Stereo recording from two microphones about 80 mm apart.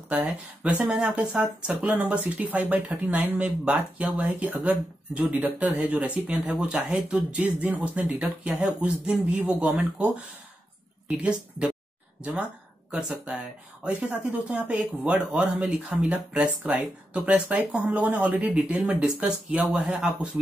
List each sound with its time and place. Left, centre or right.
0.1 s speech: centre
7.0 s speech: centre
13.8 s speech: centre
18.8 s speech: centre